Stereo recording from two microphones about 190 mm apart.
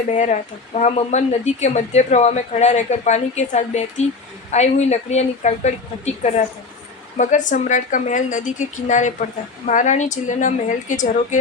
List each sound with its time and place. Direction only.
0.1 s speech: 40° left (ahead or behind)
7.2 s speech: 40° left (ahead or behind)